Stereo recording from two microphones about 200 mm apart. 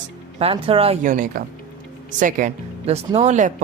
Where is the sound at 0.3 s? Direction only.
30° right (ahead or behind).